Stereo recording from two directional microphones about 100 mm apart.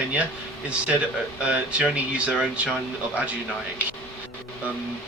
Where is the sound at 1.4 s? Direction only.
10° right (ahead or behind).